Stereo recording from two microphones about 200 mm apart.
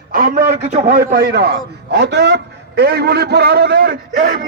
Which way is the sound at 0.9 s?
45° right (ahead or behind).